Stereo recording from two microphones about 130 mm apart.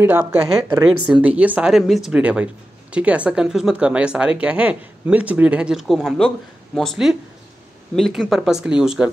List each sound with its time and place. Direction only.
0.0 s speech: 15° right (ahead or behind)